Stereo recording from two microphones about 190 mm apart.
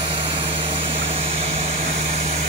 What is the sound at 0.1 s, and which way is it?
Vehicle, 30° right (ahead or behind).